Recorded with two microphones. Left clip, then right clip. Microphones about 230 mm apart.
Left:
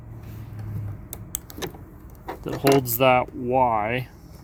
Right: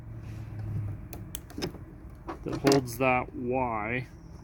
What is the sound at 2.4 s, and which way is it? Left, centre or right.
Speech, left.